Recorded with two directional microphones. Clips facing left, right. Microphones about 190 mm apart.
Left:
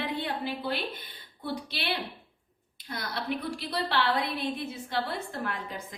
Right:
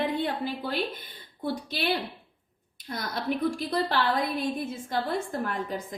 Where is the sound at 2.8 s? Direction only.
45° right (ahead or behind).